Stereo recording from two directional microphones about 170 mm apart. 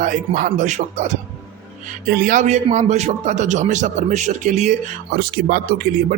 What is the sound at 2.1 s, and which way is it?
A man's voice, 55° right (ahead or behind).